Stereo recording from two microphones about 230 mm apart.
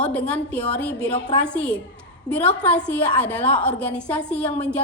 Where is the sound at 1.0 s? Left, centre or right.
Centre.